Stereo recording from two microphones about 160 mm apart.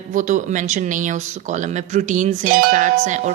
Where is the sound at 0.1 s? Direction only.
55° right (ahead or behind).